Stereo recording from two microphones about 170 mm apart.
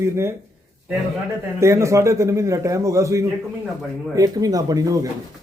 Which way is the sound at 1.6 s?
15° right (ahead or behind).